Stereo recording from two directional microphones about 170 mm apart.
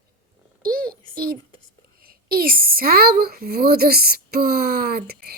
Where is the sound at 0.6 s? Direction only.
60° right (ahead or behind).